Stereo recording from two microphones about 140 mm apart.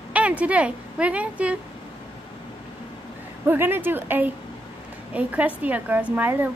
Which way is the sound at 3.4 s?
15° right (ahead or behind).